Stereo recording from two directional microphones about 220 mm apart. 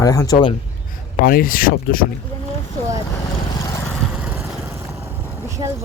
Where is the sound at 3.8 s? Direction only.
10° left (ahead or behind).